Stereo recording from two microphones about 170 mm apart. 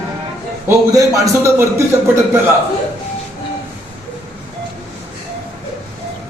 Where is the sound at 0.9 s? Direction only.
20° right (ahead or behind).